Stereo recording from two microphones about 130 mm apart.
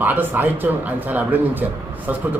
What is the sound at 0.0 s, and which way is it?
A man's voice, 15° right (ahead or behind).